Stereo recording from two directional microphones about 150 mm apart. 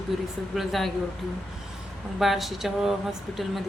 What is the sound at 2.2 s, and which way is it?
Speech, centre (ahead or behind).